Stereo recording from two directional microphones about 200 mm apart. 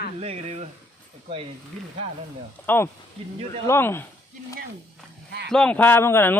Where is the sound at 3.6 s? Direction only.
15° left (ahead or behind).